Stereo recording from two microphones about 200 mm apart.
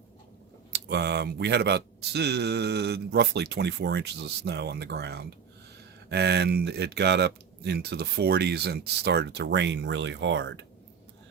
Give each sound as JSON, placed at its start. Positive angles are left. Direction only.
{"t": 0.7, "sound": "speech", "side_deg": -55}